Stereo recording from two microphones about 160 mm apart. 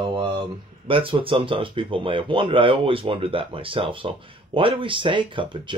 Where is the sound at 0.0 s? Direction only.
30° right (ahead or behind).